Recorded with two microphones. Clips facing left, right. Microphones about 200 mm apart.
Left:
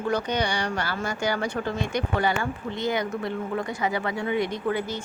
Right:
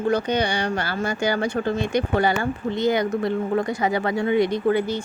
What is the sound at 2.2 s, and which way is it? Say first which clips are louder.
Speech: right 4 dB; 35° right (ahead or behind).